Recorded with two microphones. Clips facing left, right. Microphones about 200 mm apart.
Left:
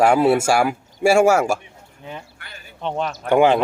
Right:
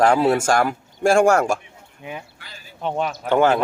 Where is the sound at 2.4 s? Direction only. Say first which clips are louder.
Left 2 dB; 60° left (ahead or behind).